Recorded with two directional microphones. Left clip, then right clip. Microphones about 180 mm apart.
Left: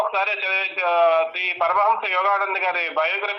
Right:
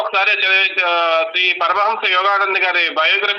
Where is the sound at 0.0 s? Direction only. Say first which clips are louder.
Right 6 dB; 25° right (ahead or behind).